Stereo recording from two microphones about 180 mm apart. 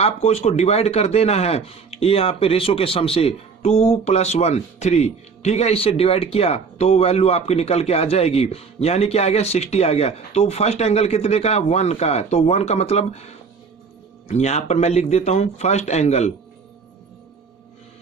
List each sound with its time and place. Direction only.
0.0 s a man's voice: 35° left (ahead or behind)